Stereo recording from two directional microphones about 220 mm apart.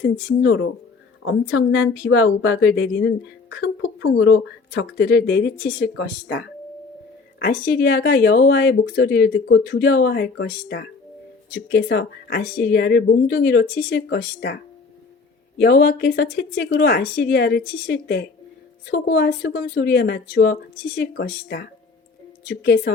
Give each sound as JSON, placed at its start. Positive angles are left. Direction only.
{"t": 0.4, "sound": "speech", "side_deg": 50}